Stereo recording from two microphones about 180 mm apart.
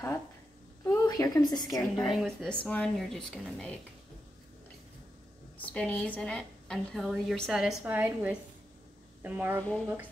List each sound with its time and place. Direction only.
0.8 s a woman's voice: 20° left (ahead or behind)
2.0 s a woman's voice: centre (ahead or behind)
5.6 s a woman's voice: 10° left (ahead or behind); by 9.6 s 10° right (ahead or behind)